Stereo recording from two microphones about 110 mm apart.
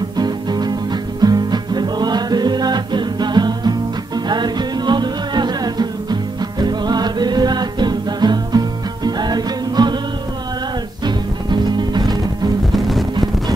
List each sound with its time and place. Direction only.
0.2 s music: 40° right (ahead or behind)
11.1 s music: 40° right (ahead or behind)
12.7 s music: centre (ahead or behind)